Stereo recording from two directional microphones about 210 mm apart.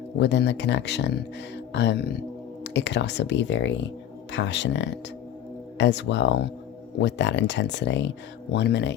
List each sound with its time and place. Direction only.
0.2 s speech: 55° left (ahead or behind)